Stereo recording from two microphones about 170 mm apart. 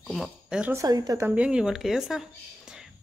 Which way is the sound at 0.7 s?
20° right (ahead or behind).